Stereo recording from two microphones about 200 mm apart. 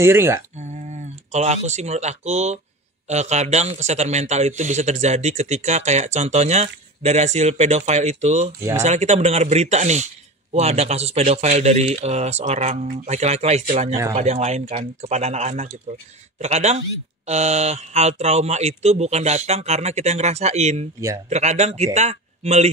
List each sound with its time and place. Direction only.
0.0 s speech: 15° right (ahead or behind)
0.6 s a man's voice: 35° right (ahead or behind)